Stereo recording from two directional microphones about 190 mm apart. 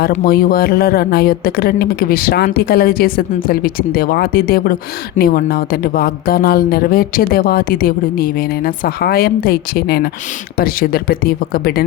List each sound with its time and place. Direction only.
0.3 s a woman's voice: 50° left (ahead or behind)